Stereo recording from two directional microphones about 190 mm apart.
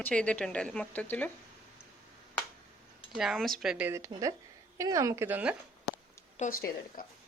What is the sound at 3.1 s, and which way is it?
Speech, centre (ahead or behind).